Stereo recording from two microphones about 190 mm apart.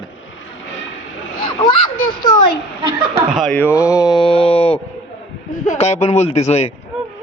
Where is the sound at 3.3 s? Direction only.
Centre (ahead or behind).